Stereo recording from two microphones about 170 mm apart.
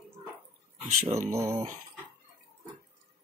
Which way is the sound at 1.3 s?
15° right (ahead or behind).